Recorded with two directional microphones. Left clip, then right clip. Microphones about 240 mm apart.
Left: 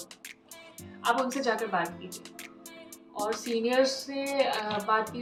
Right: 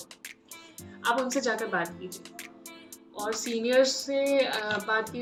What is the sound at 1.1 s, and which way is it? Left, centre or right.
Speech, centre.